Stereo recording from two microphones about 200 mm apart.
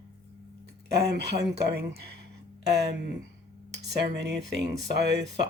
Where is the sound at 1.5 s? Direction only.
55° right (ahead or behind).